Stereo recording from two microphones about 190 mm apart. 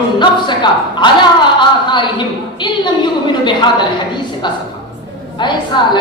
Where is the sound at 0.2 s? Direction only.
25° left (ahead or behind).